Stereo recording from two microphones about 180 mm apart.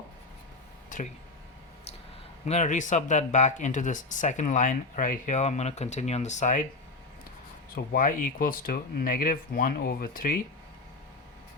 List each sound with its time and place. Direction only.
0.9 s speech: 45° left (ahead or behind)
2.4 s speech: 40° left (ahead or behind)
7.9 s speech: 50° left (ahead or behind)